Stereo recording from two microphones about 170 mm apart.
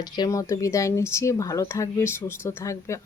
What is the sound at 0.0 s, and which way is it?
Speech, 20° left (ahead or behind).